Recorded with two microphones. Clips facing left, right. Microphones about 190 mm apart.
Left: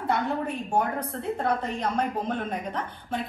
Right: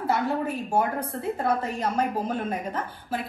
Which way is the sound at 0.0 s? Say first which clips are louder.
Right 1 dB; 5° right (ahead or behind).